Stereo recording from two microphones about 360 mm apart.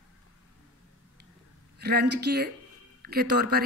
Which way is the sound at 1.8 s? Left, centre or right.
Right.